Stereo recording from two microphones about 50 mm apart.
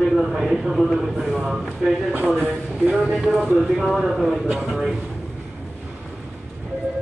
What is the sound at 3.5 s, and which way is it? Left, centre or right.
Speech, centre.